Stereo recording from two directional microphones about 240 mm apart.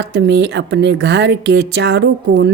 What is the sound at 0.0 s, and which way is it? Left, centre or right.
A woman's voice, right.